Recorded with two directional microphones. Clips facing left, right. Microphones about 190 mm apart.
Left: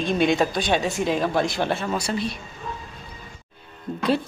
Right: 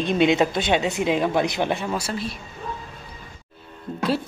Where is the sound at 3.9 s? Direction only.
5° right (ahead or behind).